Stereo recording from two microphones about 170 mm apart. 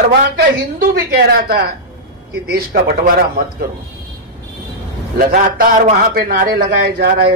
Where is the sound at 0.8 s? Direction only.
60° right (ahead or behind).